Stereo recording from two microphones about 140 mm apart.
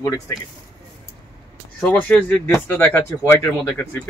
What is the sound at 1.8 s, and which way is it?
A man's voice, 5° left (ahead or behind).